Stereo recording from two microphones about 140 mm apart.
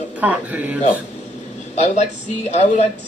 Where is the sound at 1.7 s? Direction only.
55° left (ahead or behind).